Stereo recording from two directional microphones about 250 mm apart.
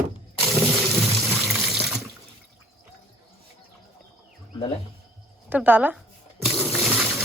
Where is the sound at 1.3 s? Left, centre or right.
Centre.